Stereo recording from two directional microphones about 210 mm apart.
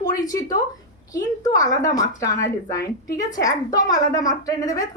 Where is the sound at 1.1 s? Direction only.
15° left (ahead or behind).